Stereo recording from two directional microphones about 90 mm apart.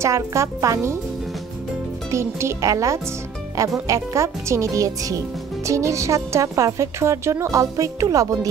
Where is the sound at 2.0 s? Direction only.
30° right (ahead or behind).